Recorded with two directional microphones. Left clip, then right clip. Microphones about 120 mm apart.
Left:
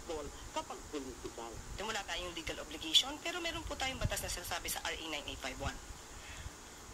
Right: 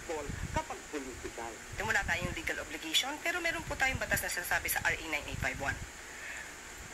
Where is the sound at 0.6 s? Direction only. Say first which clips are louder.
Right 5 dB; 20° left (ahead or behind).